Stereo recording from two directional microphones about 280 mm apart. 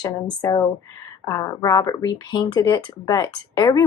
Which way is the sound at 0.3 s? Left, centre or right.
Centre.